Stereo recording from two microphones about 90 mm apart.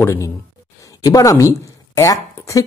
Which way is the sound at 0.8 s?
40° left (ahead or behind).